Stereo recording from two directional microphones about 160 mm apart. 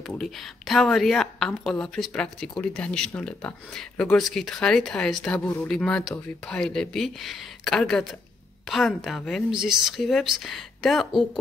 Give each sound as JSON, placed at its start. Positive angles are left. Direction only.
{"t": 0.1, "sound": "speech", "side_deg": 0}
{"t": 5.4, "sound": "speech", "side_deg": 20}
{"t": 5.7, "sound": "speech", "side_deg": 5}